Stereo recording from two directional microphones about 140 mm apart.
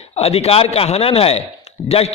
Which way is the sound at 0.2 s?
45° left (ahead or behind).